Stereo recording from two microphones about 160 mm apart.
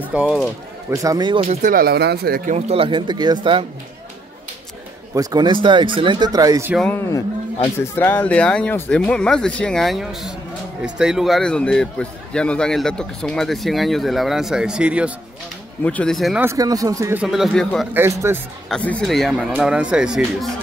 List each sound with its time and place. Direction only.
0.0 s a man's voice: 10° right (ahead or behind)
0.8 s speech: 20° right (ahead or behind); by 1.7 s 40° right (ahead or behind)
1.7 s speech: 70° right (ahead or behind)
2.5 s speech: 35° right (ahead or behind)
5.1 s speech: 25° right (ahead or behind)
6.8 s a man's voice: 15° left (ahead or behind); by 15.1 s 10° right (ahead or behind)
15.8 s a man's voice: 10° left (ahead or behind)
16.3 s speech: 20° right (ahead or behind)
17.2 s a man's voice: centre (ahead or behind)
17.9 s speech: 15° right (ahead or behind)
18.7 s a man's voice: 5° left (ahead or behind)